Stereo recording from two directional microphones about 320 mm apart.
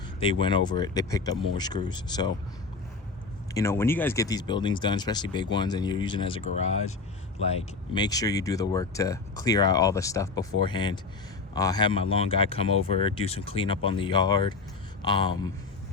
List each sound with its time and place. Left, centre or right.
0.2 s speech: centre
3.5 s speech: centre
7.4 s speech: centre